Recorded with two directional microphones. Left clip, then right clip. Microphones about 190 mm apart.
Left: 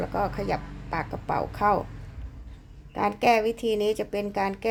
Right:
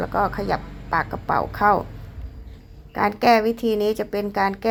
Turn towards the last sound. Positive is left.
turn(degrees=0)  # may be behind; listen again after turning